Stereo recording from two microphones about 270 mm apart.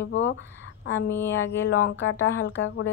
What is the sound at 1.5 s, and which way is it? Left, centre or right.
Speech, left.